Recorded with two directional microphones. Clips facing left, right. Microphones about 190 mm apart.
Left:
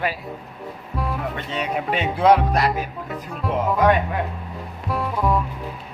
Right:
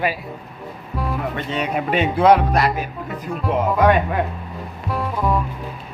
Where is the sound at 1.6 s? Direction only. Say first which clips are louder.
Right 4 dB; 60° right (ahead or behind).